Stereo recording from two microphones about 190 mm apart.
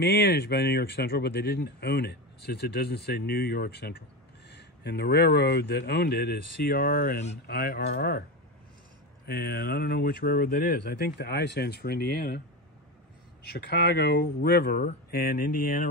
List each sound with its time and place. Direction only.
0.0 s speech: 60° left (ahead or behind)
9.2 s speech: 50° left (ahead or behind)
13.5 s speech: 55° left (ahead or behind)